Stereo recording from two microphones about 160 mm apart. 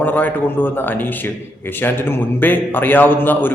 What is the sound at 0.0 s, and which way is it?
A man's voice, 10° left (ahead or behind).